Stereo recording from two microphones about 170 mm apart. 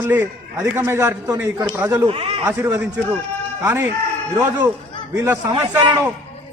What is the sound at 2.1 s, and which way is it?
Speech, 35° right (ahead or behind).